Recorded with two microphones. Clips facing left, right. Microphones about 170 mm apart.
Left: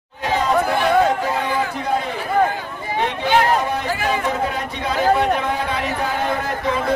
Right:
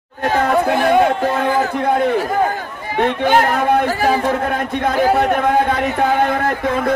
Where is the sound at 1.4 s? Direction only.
55° right (ahead or behind).